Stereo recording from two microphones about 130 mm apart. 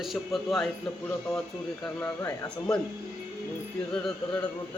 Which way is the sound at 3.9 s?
5° left (ahead or behind).